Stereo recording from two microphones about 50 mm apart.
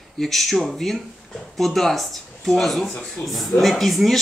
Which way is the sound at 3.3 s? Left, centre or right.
Centre.